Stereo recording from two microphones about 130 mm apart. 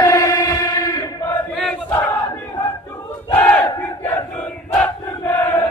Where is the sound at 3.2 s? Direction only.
15° left (ahead or behind).